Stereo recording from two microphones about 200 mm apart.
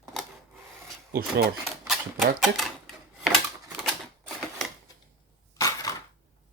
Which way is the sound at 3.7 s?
Centre (ahead or behind).